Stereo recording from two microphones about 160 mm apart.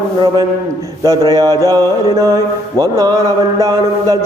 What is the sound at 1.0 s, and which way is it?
A man's voice, 20° right (ahead or behind).